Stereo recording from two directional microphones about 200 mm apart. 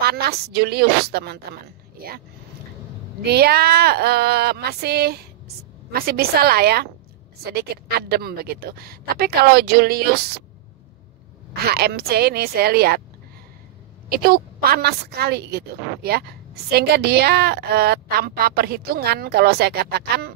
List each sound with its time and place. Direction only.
0.0 s a woman's voice: 50° right (ahead or behind)
3.3 s a woman's voice: 55° right (ahead or behind)
11.5 s a woman's voice: 50° right (ahead or behind)
14.0 s a woman's voice: 50° right (ahead or behind)